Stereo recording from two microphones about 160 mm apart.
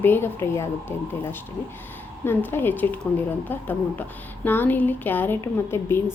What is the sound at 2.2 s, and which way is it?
A woman's voice, 15° left (ahead or behind).